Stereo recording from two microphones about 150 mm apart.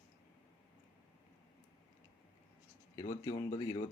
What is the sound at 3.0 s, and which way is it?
Speech, 20° left (ahead or behind).